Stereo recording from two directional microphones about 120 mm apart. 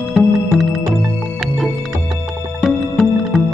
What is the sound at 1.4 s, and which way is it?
Music, centre (ahead or behind).